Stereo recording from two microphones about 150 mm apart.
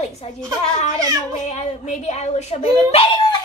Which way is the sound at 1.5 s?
50° left (ahead or behind).